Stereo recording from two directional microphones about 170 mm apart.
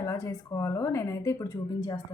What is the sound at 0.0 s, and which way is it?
A woman's voice, 20° left (ahead or behind).